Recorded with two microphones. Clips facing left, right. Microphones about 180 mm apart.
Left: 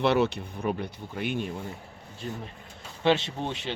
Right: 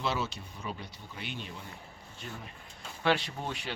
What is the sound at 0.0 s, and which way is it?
Speech, 65° left (ahead or behind).